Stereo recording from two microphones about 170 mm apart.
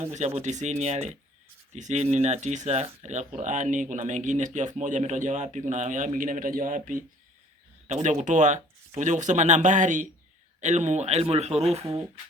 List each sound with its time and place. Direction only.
0.1 s speech: 40° right (ahead or behind)